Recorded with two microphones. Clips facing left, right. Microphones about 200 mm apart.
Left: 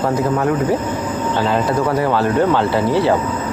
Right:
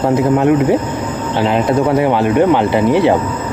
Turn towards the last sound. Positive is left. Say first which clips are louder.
# right 4 dB
turn(degrees=-20)  # may be behind; listen again after turning